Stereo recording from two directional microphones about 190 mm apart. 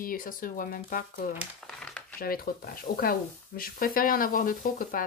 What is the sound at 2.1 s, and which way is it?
Speech, 50° left (ahead or behind).